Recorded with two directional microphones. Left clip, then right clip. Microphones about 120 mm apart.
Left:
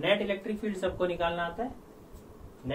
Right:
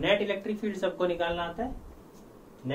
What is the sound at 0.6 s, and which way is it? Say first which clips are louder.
Speech: right 1 dB; 35° right (ahead or behind).